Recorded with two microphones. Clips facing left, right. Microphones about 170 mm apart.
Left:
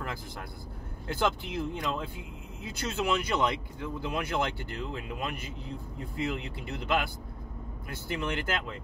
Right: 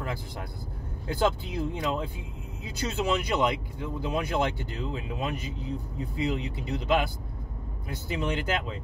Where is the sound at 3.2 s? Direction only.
20° right (ahead or behind).